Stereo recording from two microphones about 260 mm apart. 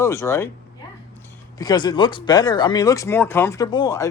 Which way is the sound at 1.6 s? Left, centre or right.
Centre.